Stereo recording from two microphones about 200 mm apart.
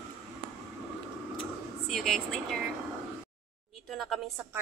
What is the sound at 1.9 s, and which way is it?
Speech, centre (ahead or behind).